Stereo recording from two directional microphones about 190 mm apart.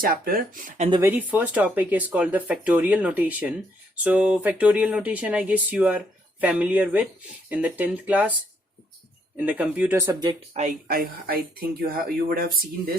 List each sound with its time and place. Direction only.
0.0 s speech: 50° right (ahead or behind)
0.9 s speech: 20° right (ahead or behind)
1.3 s speech: 5° right (ahead or behind)
9.5 s speech: 10° right (ahead or behind)
10.5 s speech: 40° right (ahead or behind)